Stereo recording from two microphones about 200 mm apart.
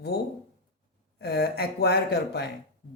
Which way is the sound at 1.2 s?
50° left (ahead or behind).